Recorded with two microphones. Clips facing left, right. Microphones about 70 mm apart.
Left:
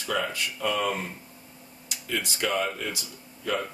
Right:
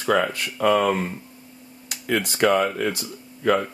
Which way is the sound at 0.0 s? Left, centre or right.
Right.